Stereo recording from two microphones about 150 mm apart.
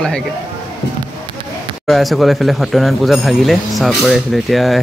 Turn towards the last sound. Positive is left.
turn(degrees=0)  # may be behind; listen again after turning